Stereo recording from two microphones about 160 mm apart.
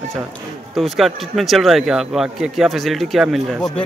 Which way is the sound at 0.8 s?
Centre (ahead or behind).